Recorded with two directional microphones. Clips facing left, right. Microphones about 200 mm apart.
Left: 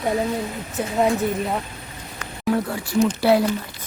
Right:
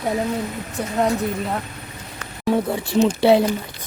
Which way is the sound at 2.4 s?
25° right (ahead or behind).